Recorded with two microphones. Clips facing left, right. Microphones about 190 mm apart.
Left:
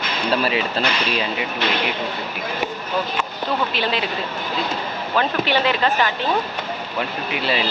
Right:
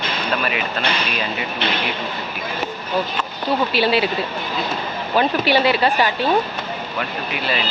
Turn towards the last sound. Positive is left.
turn(degrees=25)  # may be behind; listen again after turning